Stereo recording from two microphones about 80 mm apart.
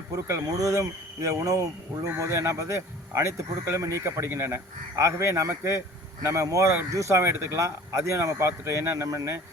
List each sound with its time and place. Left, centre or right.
0.1 s speech: right